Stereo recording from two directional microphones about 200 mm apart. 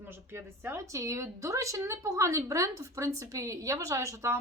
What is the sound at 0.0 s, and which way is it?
Speech, 10° right (ahead or behind).